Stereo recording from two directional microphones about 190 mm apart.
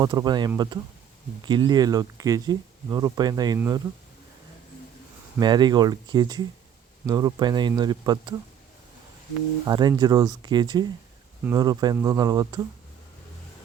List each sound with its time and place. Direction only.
0.0 s speech: 20° right (ahead or behind)
5.4 s speech: 20° right (ahead or behind)
9.6 s speech: 20° right (ahead or behind)